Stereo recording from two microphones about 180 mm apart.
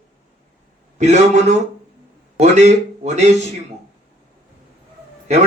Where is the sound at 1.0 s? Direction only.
40° right (ahead or behind).